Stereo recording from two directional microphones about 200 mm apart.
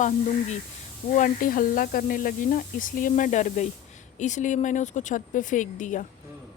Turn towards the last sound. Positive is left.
turn(degrees=40)  # may be behind; listen again after turning